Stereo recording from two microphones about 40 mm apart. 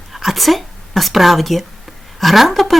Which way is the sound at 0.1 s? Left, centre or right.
Centre.